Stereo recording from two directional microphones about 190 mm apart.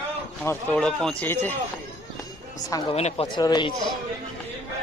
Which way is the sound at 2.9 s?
35° left (ahead or behind).